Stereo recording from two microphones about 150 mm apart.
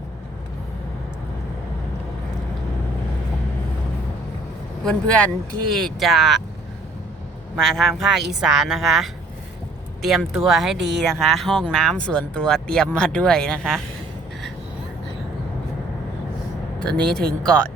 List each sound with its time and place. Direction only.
4.8 s speech: 5° left (ahead or behind)
7.6 s speech: centre (ahead or behind)
17.0 s speech: 5° left (ahead or behind)